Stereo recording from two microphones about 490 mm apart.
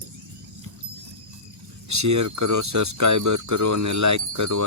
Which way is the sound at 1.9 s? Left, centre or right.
Right.